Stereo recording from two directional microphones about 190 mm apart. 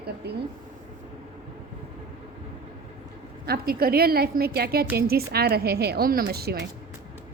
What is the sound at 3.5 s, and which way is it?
A woman's voice, 55° right (ahead or behind).